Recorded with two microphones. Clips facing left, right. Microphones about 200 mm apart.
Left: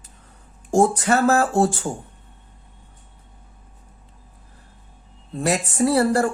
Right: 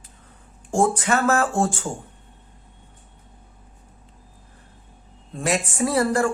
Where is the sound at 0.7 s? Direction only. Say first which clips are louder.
Left 3 dB; 40° left (ahead or behind).